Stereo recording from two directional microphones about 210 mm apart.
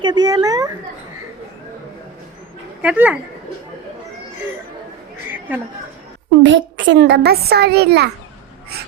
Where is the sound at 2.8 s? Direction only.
5° right (ahead or behind).